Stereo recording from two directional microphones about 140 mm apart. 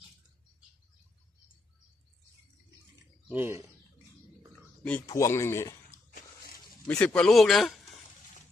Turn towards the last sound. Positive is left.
turn(degrees=0)  # may be behind; listen again after turning